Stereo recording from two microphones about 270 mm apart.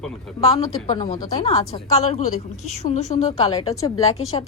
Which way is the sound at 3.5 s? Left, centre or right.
Centre.